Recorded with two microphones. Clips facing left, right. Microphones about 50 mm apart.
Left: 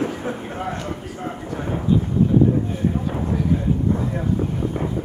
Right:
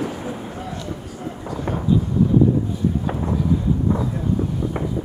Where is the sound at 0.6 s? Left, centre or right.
Left.